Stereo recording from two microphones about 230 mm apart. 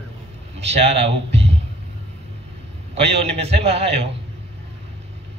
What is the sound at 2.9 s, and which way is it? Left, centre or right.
Speech, right.